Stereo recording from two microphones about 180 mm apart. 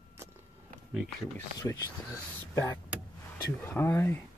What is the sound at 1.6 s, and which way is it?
Speech, 20° left (ahead or behind).